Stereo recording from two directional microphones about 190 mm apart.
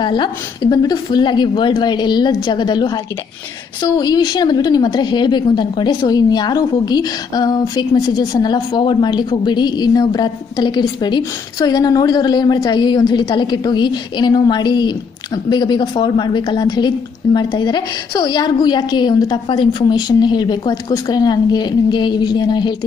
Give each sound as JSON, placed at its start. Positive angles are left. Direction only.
{"t": 0.0, "sound": "a woman's voice", "side_deg": 25}
{"t": 4.0, "sound": "a woman's voice", "side_deg": 20}